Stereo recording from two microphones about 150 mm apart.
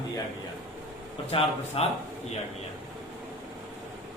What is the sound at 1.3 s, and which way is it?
Speech, 40° left (ahead or behind).